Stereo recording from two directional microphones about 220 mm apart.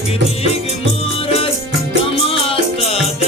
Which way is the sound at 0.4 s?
25° left (ahead or behind).